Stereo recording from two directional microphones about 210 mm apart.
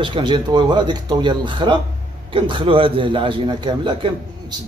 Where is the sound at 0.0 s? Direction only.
25° right (ahead or behind).